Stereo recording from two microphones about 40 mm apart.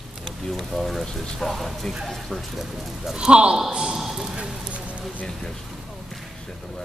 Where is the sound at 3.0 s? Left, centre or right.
Centre.